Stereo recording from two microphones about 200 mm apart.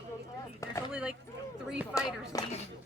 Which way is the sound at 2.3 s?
15° left (ahead or behind).